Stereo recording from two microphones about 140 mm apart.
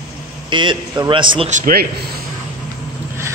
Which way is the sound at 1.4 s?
70° right (ahead or behind).